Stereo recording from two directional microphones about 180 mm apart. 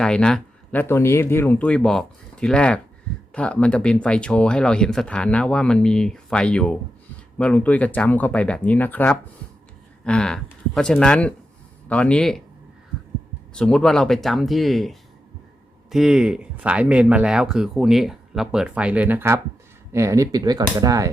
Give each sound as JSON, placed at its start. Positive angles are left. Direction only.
{"t": 0.0, "sound": "speech", "side_deg": 5}
{"t": 13.5, "sound": "speech", "side_deg": 5}